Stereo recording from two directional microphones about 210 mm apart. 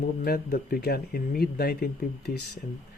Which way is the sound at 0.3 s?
45° left (ahead or behind).